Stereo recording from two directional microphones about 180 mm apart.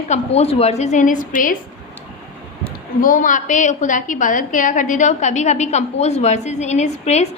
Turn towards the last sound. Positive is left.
turn(degrees=40)  # may be behind; listen again after turning